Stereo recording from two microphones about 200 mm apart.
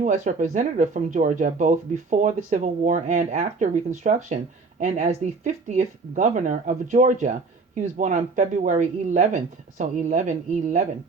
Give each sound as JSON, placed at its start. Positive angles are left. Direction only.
{"t": 0.0, "sound": "speech", "side_deg": -40}